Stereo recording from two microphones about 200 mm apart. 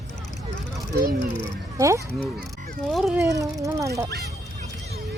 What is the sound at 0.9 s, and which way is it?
Speech, 45° right (ahead or behind).